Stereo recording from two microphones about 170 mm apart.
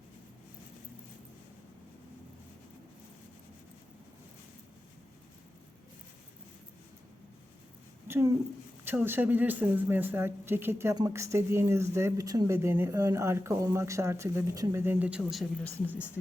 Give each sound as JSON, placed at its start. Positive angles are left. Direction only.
{"t": 8.0, "sound": "a woman's voice", "side_deg": -15}